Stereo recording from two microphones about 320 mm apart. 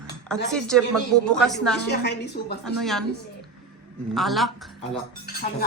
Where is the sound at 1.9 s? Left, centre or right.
Left.